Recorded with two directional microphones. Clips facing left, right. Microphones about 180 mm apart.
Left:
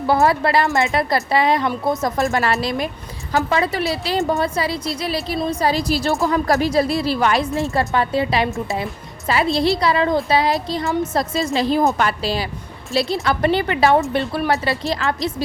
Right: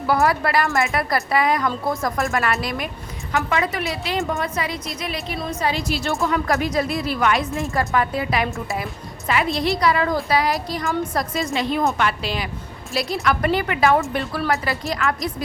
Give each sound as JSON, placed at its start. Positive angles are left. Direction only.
{"t": 0.1, "sound": "a woman's voice", "side_deg": 25}
{"t": 2.3, "sound": "a woman's voice", "side_deg": 30}
{"t": 8.4, "sound": "a woman's voice", "side_deg": 20}
{"t": 9.2, "sound": "a woman's voice", "side_deg": 30}